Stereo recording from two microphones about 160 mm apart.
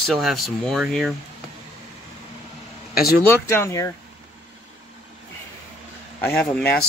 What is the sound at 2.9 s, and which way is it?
Speech, 70° left (ahead or behind).